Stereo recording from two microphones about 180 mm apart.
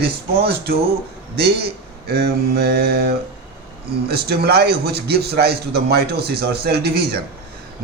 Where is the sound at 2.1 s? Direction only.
60° right (ahead or behind).